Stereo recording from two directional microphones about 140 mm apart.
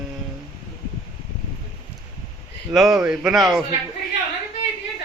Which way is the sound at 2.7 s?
5° right (ahead or behind).